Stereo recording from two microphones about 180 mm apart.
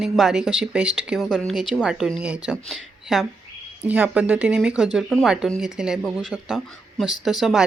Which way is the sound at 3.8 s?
10° right (ahead or behind).